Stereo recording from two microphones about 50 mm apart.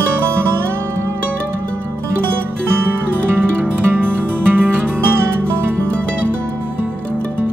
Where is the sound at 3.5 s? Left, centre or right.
Right.